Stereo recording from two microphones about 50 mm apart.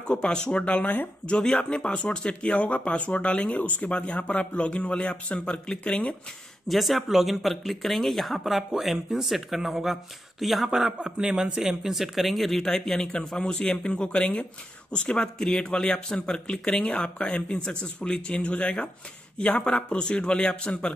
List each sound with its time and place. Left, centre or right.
0.0 s speech: centre
6.7 s speech: centre
12.9 s speech: centre